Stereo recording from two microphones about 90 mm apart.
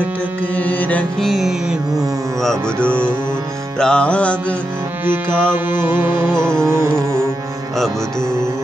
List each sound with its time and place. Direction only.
0.6 s music: 15° left (ahead or behind)
1.2 s music: 5° right (ahead or behind)
2.8 s music: 15° left (ahead or behind)
5.0 s music: 25° right (ahead or behind)